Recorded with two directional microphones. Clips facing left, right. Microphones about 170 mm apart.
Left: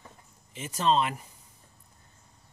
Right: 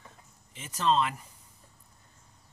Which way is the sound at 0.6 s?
20° left (ahead or behind).